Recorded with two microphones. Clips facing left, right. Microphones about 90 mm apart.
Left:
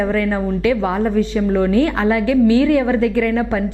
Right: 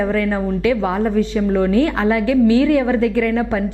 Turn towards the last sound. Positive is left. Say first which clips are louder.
# even
turn(degrees=20)  # may be behind; listen again after turning